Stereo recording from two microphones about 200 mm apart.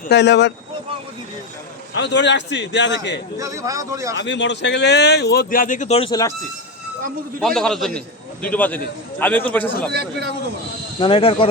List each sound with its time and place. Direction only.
0.1 s speech: 60° left (ahead or behind)
2.0 s speech: 60° left (ahead or behind)
3.3 s a man's voice: 15° right (ahead or behind)
4.1 s speech: 60° left (ahead or behind); by 6.1 s 35° left (ahead or behind)
6.1 s speech: 20° left (ahead or behind)
7.4 s a man's voice: centre (ahead or behind)
9.9 s speech: 50° right (ahead or behind)
11.0 s speech: 25° left (ahead or behind)